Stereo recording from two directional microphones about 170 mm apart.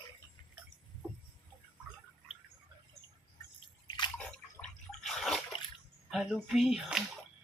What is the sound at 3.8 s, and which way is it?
Bathtub, 25° left (ahead or behind).